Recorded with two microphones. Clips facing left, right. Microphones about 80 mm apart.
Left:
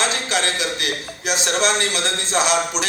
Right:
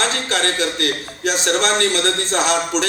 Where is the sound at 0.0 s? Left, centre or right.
Right.